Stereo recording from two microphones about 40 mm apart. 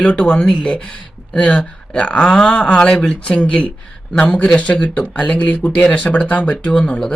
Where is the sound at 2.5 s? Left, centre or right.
Left.